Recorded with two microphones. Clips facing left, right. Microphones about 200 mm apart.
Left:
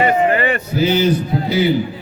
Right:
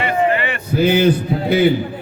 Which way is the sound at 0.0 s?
40° left (ahead or behind).